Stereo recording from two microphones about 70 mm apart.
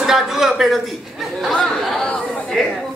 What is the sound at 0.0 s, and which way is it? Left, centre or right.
Speech, centre.